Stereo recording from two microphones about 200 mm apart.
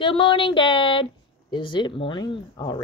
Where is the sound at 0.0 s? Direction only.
25° left (ahead or behind).